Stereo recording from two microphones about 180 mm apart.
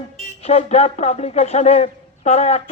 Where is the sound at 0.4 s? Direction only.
35° left (ahead or behind).